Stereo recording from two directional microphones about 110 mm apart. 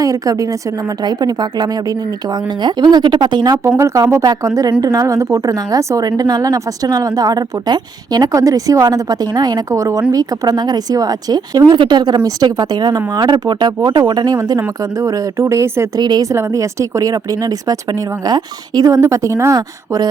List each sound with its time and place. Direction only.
0.0 s a woman's voice: 30° right (ahead or behind)
3.8 s a woman's voice: 30° right (ahead or behind)
16.0 s a woman's voice: 40° right (ahead or behind)
16.3 s a woman's voice: 25° right (ahead or behind)